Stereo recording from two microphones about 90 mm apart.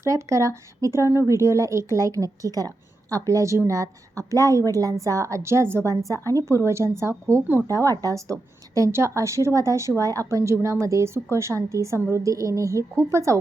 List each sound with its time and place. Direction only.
0.0 s a woman's voice: 35° right (ahead or behind)